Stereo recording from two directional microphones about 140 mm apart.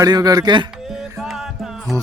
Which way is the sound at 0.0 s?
25° right (ahead or behind).